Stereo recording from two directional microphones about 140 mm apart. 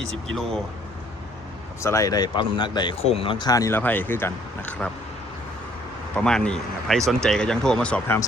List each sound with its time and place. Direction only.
0.0 s speech: 5° left (ahead or behind)
1.8 s speech: 20° left (ahead or behind)
3.0 s speech: 45° left (ahead or behind); by 4.9 s 10° left (ahead or behind)
6.1 s speech: 5° left (ahead or behind)